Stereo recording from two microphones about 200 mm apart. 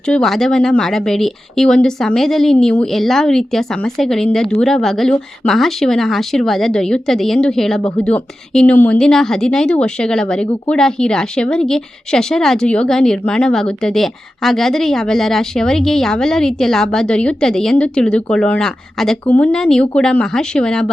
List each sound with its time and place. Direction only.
0.0 s a woman's voice: 5° left (ahead or behind)